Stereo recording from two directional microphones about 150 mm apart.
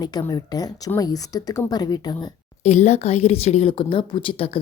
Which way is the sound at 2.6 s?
50° left (ahead or behind).